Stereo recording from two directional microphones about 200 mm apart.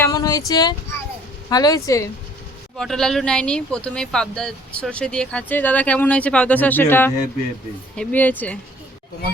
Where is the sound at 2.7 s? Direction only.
Centre (ahead or behind).